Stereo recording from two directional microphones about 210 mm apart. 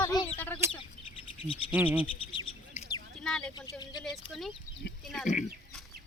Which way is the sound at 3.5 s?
20° left (ahead or behind).